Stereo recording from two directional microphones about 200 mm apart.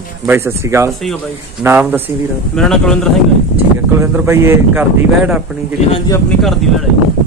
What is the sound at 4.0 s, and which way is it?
Speech, 10° right (ahead or behind).